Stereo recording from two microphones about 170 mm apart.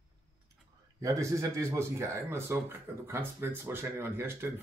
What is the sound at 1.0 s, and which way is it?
Speech, 20° right (ahead or behind).